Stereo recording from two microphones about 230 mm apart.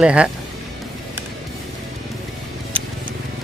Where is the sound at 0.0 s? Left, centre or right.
Centre.